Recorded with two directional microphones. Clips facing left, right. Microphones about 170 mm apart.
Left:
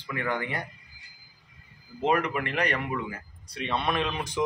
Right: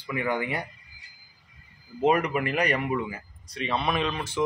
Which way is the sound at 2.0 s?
5° right (ahead or behind).